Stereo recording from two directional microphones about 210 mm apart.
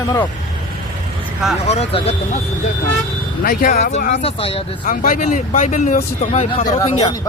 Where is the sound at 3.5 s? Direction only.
40° left (ahead or behind).